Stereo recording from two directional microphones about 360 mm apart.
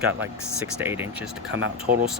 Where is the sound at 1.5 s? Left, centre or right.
Right.